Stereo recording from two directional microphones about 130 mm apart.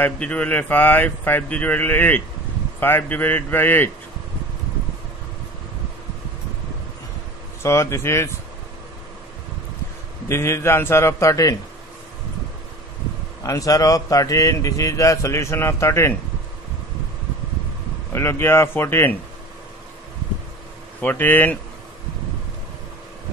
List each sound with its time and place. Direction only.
0.0 s a man's voice: 10° left (ahead or behind)
7.6 s a man's voice: 20° left (ahead or behind)
10.2 s a man's voice: 20° left (ahead or behind)
13.4 s a man's voice: 25° left (ahead or behind)
18.1 s a man's voice: 20° left (ahead or behind)
21.0 s a man's voice: 15° left (ahead or behind)